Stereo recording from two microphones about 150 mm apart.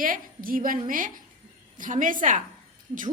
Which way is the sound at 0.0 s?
70° right (ahead or behind).